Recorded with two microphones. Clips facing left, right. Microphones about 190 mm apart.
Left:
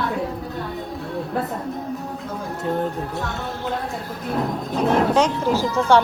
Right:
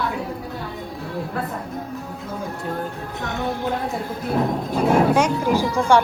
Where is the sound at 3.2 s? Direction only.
15° right (ahead or behind).